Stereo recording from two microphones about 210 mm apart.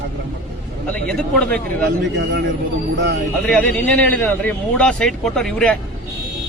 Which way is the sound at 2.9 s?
55° right (ahead or behind).